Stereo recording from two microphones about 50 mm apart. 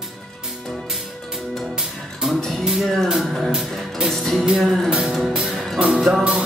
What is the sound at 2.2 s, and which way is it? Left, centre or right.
Music, centre.